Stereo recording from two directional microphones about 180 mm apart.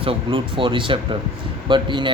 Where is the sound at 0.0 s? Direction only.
30° right (ahead or behind).